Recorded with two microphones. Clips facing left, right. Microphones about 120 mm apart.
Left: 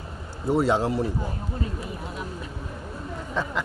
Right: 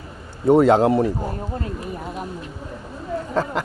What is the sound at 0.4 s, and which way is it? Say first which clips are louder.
Speech: right 8 dB; 55° right (ahead or behind).